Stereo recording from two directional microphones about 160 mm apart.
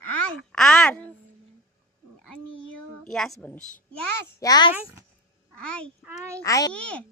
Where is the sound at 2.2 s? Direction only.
5° left (ahead or behind).